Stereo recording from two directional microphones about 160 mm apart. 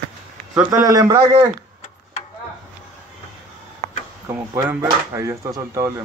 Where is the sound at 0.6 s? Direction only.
10° right (ahead or behind).